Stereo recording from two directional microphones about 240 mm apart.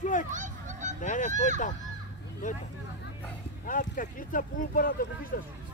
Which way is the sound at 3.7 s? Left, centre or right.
Left.